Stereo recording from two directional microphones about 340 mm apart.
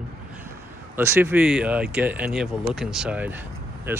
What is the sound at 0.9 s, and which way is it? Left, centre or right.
Speech, centre.